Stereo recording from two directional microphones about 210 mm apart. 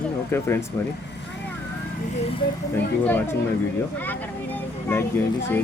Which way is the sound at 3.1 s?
10° left (ahead or behind).